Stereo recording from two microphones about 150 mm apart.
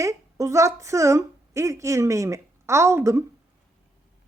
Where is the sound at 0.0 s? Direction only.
20° right (ahead or behind).